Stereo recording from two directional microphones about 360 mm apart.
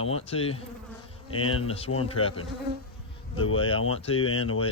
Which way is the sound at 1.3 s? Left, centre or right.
Left.